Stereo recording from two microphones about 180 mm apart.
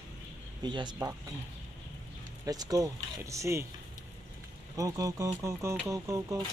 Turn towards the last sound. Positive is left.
turn(degrees=-20)  # may be behind; listen again after turning